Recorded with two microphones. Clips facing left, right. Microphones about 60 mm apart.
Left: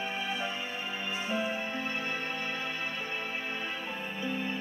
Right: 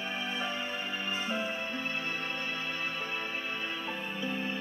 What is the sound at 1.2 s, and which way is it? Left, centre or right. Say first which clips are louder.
Music: left 4 dB; left.